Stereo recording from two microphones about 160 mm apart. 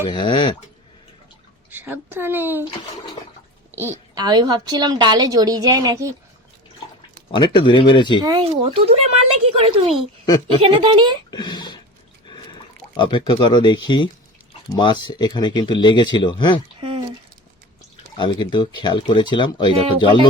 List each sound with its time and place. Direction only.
0.1 s speech: 30° left (ahead or behind)
1.7 s speech: 10° right (ahead or behind)
4.1 s a woman's voice: 25° right (ahead or behind)
7.3 s speech: 30° left (ahead or behind)
8.2 s speech: 30° right (ahead or behind)
11.3 s a sound: 25° left (ahead or behind)
13.0 s speech: 30° left (ahead or behind)
18.2 s speech: 30° left (ahead or behind)
19.7 s speech: 35° right (ahead or behind)